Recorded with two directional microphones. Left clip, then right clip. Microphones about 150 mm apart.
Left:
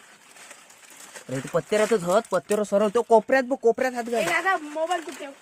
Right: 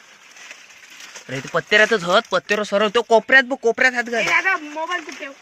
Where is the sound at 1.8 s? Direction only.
15° right (ahead or behind).